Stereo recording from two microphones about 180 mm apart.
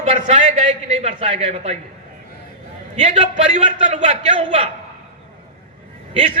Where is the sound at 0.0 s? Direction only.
40° right (ahead or behind).